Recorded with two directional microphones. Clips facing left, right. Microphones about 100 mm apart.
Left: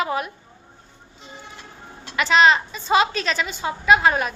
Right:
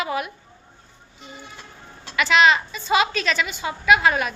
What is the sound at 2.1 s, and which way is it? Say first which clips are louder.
A woman's voice: left 1 dB; 35° left (ahead or behind).